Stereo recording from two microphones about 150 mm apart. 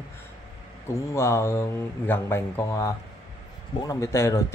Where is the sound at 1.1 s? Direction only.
20° left (ahead or behind).